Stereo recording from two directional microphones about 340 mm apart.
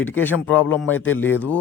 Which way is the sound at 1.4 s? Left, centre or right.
Centre.